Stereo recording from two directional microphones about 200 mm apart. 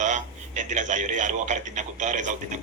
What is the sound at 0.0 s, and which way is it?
A man's voice, 40° right (ahead or behind).